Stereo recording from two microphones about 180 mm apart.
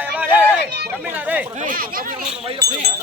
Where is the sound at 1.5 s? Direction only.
50° right (ahead or behind).